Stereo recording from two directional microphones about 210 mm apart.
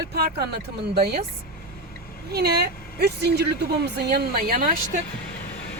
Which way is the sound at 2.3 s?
50° right (ahead or behind).